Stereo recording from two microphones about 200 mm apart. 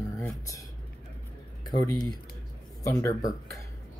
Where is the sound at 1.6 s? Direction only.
20° left (ahead or behind).